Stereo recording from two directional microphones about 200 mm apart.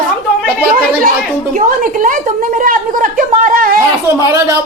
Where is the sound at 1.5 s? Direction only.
40° right (ahead or behind).